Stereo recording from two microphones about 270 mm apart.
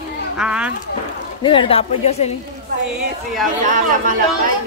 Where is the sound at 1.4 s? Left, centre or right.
Centre.